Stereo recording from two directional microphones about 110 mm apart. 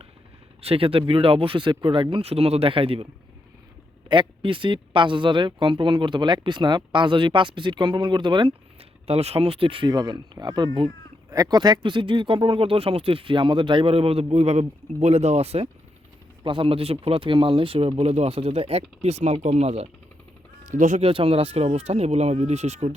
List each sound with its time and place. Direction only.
0.6 s speech: 60° right (ahead or behind)
4.1 s speech: 50° right (ahead or behind)
8.8 s speech: 65° right (ahead or behind)
9.9 s speech: 35° right (ahead or behind); by 15.7 s 70° right (ahead or behind)
16.4 s speech: 50° right (ahead or behind); by 23.0 s 80° right